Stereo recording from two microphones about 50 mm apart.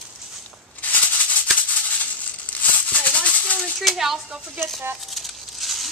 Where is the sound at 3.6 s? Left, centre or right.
Centre.